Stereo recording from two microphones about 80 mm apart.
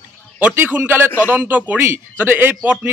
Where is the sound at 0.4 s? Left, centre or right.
Centre.